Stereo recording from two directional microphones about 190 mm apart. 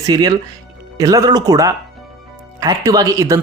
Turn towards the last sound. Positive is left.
turn(degrees=-15)  # may be behind; listen again after turning